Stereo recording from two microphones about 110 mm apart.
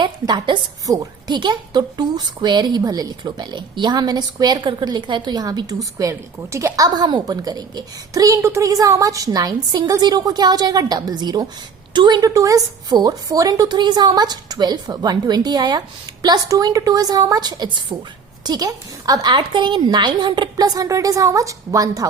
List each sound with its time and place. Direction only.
0.0 s a woman's voice: 45° right (ahead or behind)